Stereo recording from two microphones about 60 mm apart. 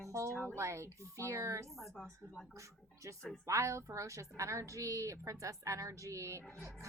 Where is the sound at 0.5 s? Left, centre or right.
Right.